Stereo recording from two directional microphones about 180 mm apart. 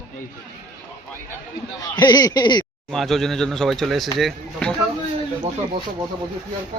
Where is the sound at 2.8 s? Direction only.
Centre (ahead or behind).